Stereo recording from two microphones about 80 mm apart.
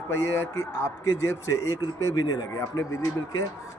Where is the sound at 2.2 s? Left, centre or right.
Left.